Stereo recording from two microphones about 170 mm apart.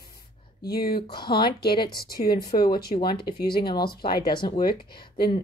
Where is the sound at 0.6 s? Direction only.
65° left (ahead or behind).